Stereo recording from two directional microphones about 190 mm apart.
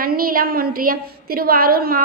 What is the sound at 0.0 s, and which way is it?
A woman's voice, 50° right (ahead or behind).